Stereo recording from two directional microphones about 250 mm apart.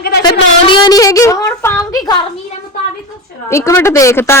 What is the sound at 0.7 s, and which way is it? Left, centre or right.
Speech, centre.